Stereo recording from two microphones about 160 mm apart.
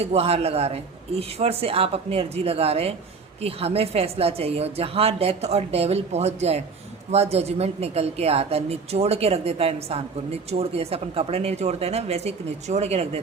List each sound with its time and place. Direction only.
0.0 s a woman's voice: 40° right (ahead or behind)